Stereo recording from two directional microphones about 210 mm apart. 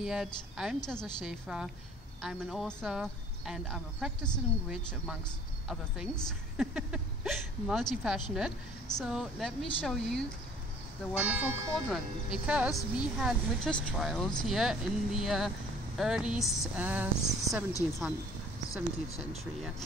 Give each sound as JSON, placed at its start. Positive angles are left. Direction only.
{"t": 0.0, "sound": "speech", "side_deg": 0}